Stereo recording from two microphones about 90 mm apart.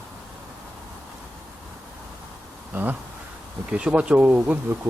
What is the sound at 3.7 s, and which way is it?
Speech, 10° right (ahead or behind).